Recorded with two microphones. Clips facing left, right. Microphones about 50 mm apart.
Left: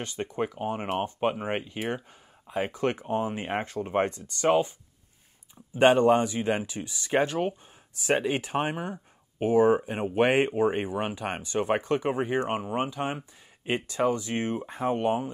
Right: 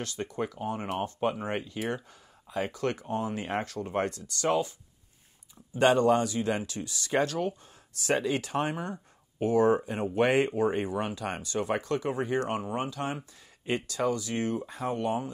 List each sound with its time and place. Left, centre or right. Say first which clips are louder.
0.0 s speech: left 2 dB; left
5.8 s speech: left 3 dB; left
9.9 s speech: left 2 dB; left